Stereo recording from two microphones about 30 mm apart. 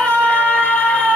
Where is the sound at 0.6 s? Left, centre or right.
Left.